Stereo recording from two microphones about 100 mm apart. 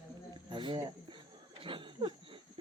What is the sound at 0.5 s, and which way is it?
Speech, 55° right (ahead or behind).